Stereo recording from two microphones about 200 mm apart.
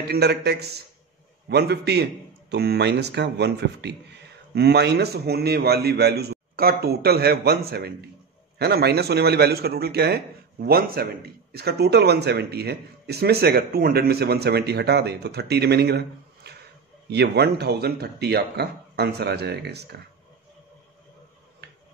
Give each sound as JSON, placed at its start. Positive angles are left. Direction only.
{"t": 0.1, "sound": "a man's voice", "side_deg": -55}